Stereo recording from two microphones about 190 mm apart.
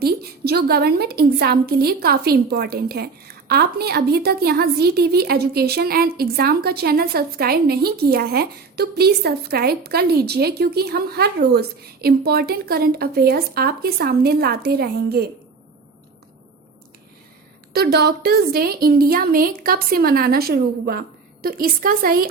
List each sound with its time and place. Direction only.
0.0 s a woman's voice: 55° right (ahead or behind)
17.7 s a woman's voice: 55° right (ahead or behind)